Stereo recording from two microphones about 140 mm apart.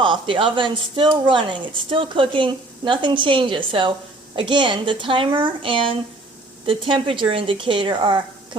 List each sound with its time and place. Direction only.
0.0 s a woman's voice: 35° right (ahead or behind)